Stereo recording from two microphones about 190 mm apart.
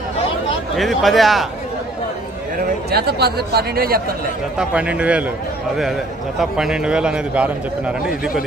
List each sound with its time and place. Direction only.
0.8 s a man's voice: centre (ahead or behind)
2.9 s speech: 55° right (ahead or behind)
4.5 s a man's voice: 5° right (ahead or behind)
6.4 s a man's voice: 5° right (ahead or behind)